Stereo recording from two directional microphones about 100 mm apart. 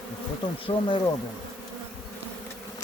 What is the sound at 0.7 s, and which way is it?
Speech, 60° left (ahead or behind).